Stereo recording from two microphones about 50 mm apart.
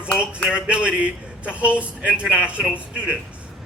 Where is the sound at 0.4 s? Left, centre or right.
Right.